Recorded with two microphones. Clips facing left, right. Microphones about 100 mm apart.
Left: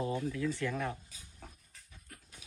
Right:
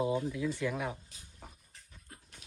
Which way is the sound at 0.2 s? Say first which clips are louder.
Right 1 dB; 15° right (ahead or behind).